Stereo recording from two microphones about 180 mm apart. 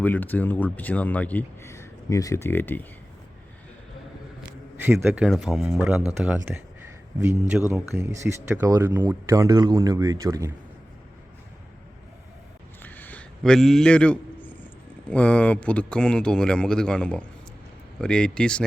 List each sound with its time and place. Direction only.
0.0 s a man's voice: 10° left (ahead or behind)
4.8 s speech: 15° right (ahead or behind)
12.8 s a sound: 10° left (ahead or behind)
15.1 s speech: 5° left (ahead or behind)